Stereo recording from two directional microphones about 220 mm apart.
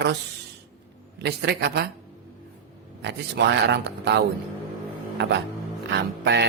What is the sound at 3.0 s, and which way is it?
Speech, 50° right (ahead or behind).